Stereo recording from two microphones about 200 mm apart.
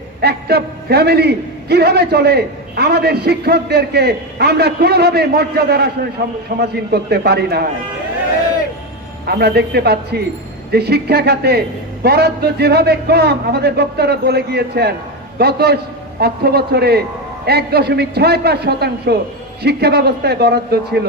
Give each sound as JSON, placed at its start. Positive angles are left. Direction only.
{"t": 0.2, "sound": "a man's voice", "side_deg": -55}
{"t": 9.2, "sound": "a man's voice", "side_deg": -50}